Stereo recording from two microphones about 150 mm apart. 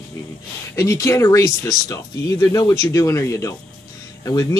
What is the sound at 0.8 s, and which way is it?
Speech, 20° left (ahead or behind).